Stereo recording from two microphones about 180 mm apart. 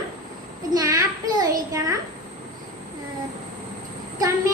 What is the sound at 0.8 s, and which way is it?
Speech, 15° right (ahead or behind).